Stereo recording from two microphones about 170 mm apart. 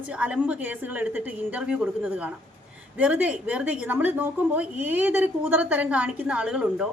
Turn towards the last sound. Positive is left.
turn(degrees=-5)  # may be behind; listen again after turning